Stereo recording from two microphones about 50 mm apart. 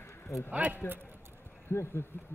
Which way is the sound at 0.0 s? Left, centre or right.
Left.